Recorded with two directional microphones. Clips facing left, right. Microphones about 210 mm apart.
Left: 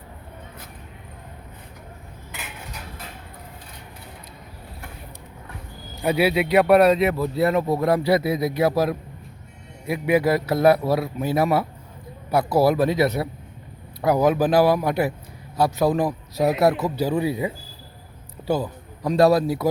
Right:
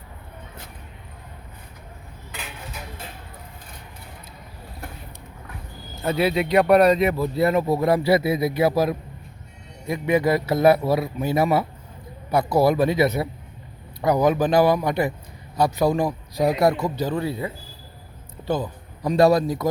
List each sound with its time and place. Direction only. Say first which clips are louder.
6.0 s speech: left 1 dB; 10° left (ahead or behind)